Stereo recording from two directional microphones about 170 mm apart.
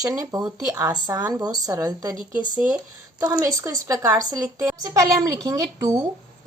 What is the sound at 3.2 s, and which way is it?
A woman's voice, 20° right (ahead or behind).